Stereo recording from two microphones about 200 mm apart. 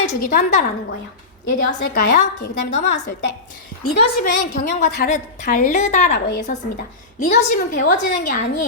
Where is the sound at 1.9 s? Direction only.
40° left (ahead or behind).